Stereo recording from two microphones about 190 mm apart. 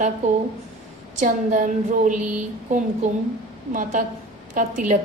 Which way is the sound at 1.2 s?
40° right (ahead or behind).